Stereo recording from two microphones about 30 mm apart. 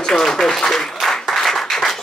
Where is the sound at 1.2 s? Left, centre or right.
Centre.